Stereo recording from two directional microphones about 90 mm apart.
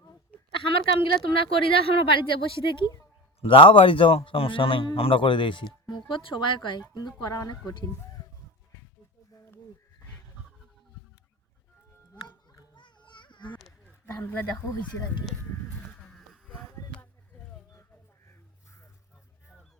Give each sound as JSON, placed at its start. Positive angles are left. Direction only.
{"t": 0.5, "sound": "a man's voice", "side_deg": 80}
{"t": 3.4, "sound": "a man's voice", "side_deg": 90}
{"t": 7.3, "sound": "speech", "side_deg": 40}
{"t": 12.7, "sound": "children playing", "side_deg": 60}
{"t": 14.1, "sound": "speech", "side_deg": 20}
{"t": 16.0, "sound": "a sound", "side_deg": 5}
{"t": 18.3, "sound": "crow", "side_deg": 35}